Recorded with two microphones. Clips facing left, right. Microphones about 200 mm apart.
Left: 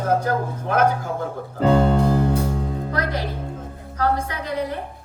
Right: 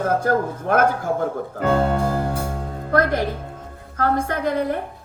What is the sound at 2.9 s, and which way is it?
Music, 50° right (ahead or behind).